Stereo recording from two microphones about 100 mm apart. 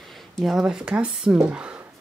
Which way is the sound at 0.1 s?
Centre (ahead or behind).